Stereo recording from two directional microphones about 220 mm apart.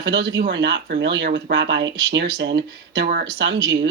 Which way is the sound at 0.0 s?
50° right (ahead or behind).